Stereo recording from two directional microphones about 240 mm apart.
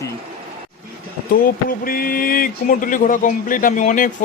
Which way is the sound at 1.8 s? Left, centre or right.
Left.